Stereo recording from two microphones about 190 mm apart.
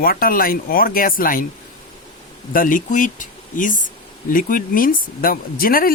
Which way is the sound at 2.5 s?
45° left (ahead or behind).